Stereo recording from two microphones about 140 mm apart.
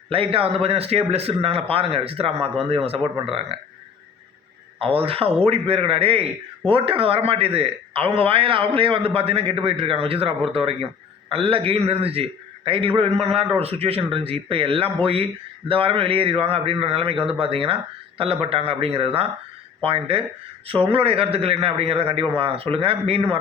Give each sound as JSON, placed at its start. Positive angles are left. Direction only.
{"t": 0.1, "sound": "a man's voice", "side_deg": -40}
{"t": 4.8, "sound": "a man's voice", "side_deg": -40}